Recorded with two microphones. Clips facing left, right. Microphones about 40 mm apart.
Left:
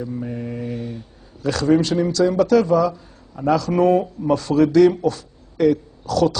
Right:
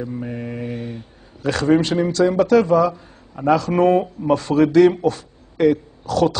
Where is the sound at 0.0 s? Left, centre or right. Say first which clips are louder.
Even; right.